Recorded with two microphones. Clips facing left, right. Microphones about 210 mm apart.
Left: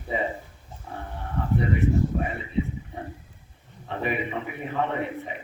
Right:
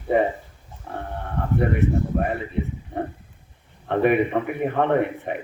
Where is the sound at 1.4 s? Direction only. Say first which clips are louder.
Right 3 dB; 60° right (ahead or behind).